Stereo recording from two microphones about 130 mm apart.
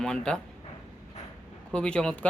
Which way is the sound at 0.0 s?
5° left (ahead or behind).